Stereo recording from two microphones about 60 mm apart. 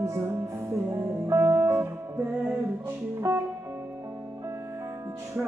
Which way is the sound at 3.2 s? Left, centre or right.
Right.